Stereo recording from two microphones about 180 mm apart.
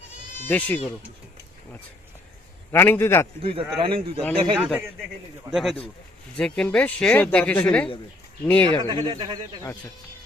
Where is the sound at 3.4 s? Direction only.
30° right (ahead or behind).